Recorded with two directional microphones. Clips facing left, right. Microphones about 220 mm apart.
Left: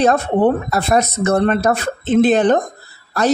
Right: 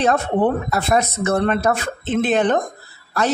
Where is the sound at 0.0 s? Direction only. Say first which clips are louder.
Left 3 dB; 40° left (ahead or behind).